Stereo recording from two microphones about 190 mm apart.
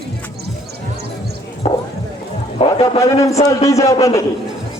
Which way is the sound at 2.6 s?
35° left (ahead or behind).